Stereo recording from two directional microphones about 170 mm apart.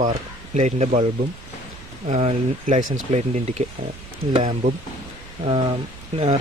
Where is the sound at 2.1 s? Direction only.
45° right (ahead or behind).